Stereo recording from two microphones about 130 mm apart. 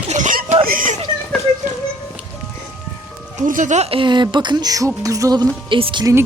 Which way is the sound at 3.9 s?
40° right (ahead or behind).